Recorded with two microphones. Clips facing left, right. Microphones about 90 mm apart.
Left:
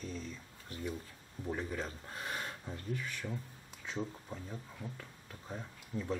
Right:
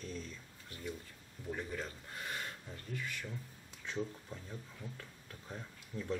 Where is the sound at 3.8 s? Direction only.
10° left (ahead or behind).